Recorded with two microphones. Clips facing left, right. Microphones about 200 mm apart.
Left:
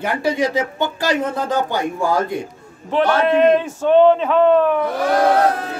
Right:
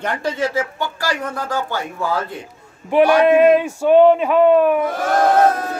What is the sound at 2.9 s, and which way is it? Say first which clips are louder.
A man's voice: right 4 dB; 10° right (ahead or behind).